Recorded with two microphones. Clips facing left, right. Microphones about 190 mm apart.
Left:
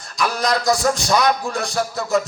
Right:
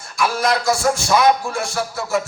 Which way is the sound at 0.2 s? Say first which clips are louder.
Right 1 dB; 15° left (ahead or behind).